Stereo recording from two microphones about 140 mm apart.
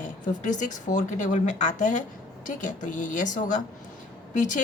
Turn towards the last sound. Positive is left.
turn(degrees=60)  # may be behind; listen again after turning